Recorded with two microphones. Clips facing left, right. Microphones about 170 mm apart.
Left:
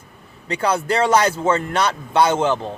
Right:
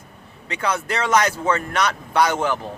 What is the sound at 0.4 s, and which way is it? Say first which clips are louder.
Speech: left 4 dB; 35° left (ahead or behind).